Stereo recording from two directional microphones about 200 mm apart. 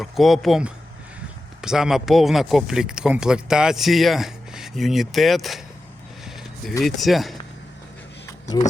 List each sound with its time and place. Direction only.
0.0 s speech: centre (ahead or behind)
6.2 s a sound: centre (ahead or behind)
6.8 s speech: centre (ahead or behind)
8.3 s power windows: 20° left (ahead or behind)